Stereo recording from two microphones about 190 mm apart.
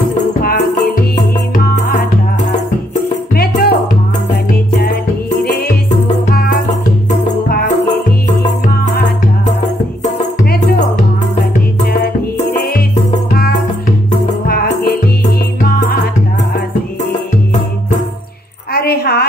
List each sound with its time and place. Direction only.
0.4 s music: 50° left (ahead or behind)
2.9 s music: 50° left (ahead or behind)
7.4 s music: 50° left (ahead or behind)
14.5 s music: 55° left (ahead or behind)
18.7 s a sound: 55° left (ahead or behind)